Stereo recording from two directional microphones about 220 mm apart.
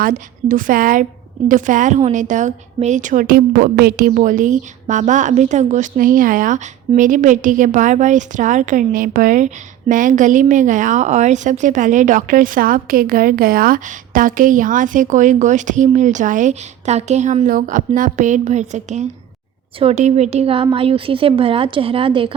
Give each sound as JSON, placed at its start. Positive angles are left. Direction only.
{"t": 0.0, "sound": "a woman's voice", "side_deg": -40}